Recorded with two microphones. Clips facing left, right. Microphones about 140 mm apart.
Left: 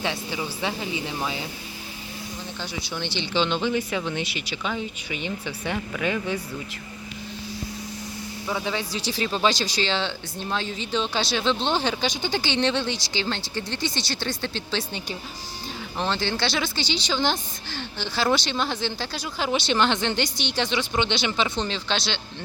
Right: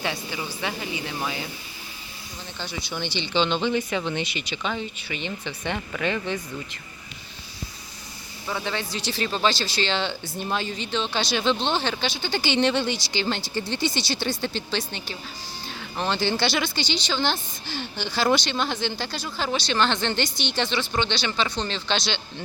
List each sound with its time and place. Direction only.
0.3 s speech: 5° left (ahead or behind)
2.9 s speech: centre (ahead or behind)
8.4 s speech: 5° left (ahead or behind)
12.4 s speech: 5° right (ahead or behind); by 17.4 s 10° left (ahead or behind)
17.9 s speech: centre (ahead or behind); by 21.4 s 15° left (ahead or behind)
21.7 s speech: 5° left (ahead or behind)